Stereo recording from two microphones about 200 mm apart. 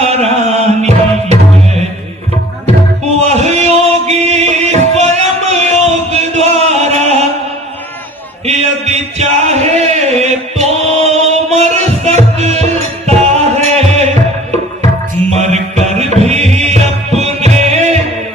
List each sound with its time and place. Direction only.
0.0 s music: 30° right (ahead or behind)
3.2 s music: 35° right (ahead or behind)
8.4 s a sound: 35° right (ahead or behind)
15.4 s music: 35° right (ahead or behind)